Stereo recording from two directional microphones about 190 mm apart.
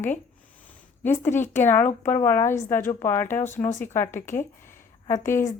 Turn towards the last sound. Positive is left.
turn(degrees=15)  # may be behind; listen again after turning